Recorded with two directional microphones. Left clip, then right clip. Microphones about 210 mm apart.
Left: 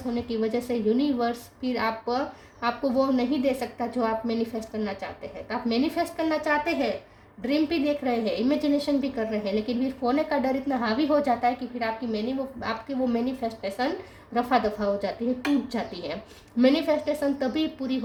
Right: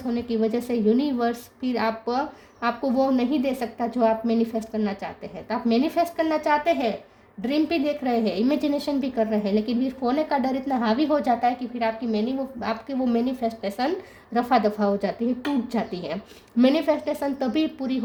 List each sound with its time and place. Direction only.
0.1 s a woman's voice: 45° right (ahead or behind)